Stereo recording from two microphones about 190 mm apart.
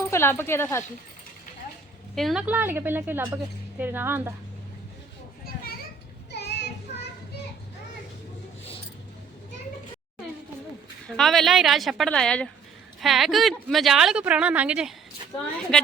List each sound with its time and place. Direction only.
0.1 s speech: 10° left (ahead or behind)
2.1 s a woman's voice: centre (ahead or behind)
6.3 s child singing: 65° left (ahead or behind)
11.2 s speech: centre (ahead or behind)